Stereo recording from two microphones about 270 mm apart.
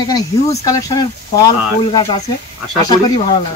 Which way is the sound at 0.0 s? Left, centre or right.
Centre.